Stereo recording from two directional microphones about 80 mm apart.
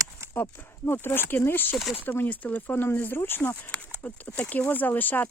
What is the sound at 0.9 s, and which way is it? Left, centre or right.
Speech, left.